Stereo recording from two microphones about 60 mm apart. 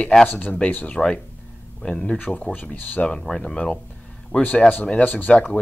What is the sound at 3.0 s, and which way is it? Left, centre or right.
Speech, centre.